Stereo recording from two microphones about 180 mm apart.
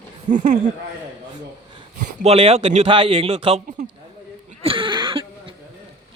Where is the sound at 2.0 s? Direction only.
35° right (ahead or behind).